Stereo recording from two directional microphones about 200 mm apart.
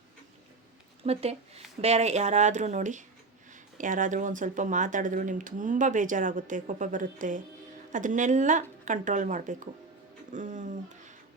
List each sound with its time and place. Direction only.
1.0 s speech: 30° right (ahead or behind)